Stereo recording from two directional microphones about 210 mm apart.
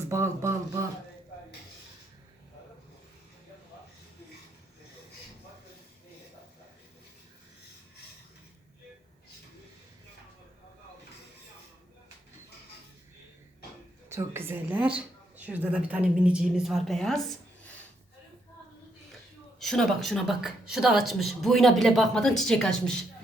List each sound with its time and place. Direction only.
0.1 s a sound: 15° right (ahead or behind)
14.1 s a woman's voice: 10° right (ahead or behind)
19.5 s speech: centre (ahead or behind)